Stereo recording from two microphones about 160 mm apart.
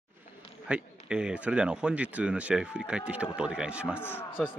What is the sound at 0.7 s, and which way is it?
Speech, 5° right (ahead or behind).